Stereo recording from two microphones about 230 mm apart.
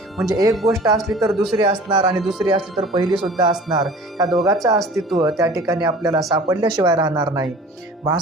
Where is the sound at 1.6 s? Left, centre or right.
Right.